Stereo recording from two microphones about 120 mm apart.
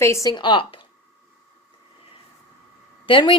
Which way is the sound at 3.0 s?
45° left (ahead or behind).